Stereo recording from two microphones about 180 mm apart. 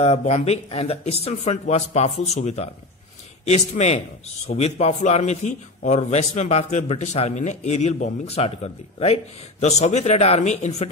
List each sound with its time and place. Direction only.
0.0 s a man's voice: 35° left (ahead or behind)